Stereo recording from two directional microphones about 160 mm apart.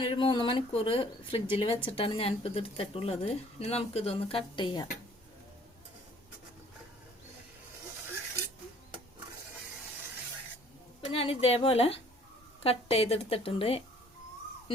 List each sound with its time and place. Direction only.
0.0 s speech: 30° left (ahead or behind)
11.0 s speech: 35° left (ahead or behind)